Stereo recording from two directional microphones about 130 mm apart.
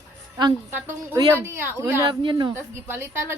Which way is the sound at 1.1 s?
20° right (ahead or behind).